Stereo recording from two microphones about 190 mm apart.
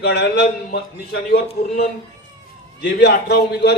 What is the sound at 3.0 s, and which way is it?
Speech, 60° left (ahead or behind).